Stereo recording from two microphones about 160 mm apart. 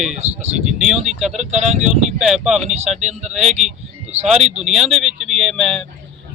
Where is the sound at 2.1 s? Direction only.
5° right (ahead or behind).